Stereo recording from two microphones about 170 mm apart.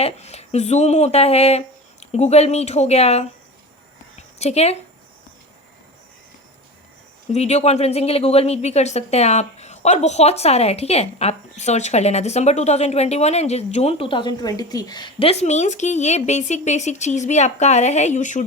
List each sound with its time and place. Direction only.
0.0 s a woman's voice: 40° left (ahead or behind)
4.4 s speech: 40° left (ahead or behind)
7.3 s a woman's voice: 40° left (ahead or behind)